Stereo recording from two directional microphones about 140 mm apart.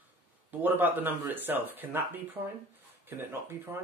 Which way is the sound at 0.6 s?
15° right (ahead or behind).